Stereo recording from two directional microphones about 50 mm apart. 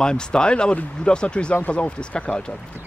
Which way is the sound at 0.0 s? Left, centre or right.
Centre.